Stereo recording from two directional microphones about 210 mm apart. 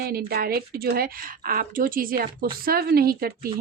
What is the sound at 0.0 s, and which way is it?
Speech, 45° right (ahead or behind).